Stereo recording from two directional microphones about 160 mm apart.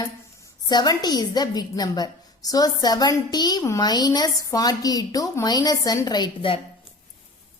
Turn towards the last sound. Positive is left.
turn(degrees=30)  # may be behind; listen again after turning